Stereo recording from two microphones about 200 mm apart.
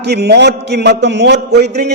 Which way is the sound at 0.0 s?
55° right (ahead or behind).